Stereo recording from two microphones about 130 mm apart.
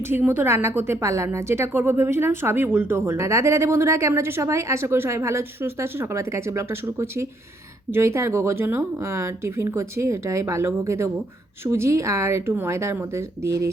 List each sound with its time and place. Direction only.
0.1 s a woman's voice: 15° right (ahead or behind)